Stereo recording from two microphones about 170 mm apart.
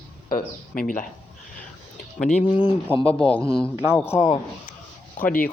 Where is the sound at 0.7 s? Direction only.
55° left (ahead or behind).